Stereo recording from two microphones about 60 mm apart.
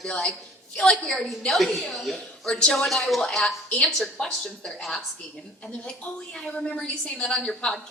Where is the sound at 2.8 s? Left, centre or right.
Centre.